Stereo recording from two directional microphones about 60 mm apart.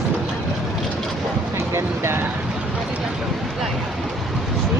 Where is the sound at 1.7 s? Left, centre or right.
Right.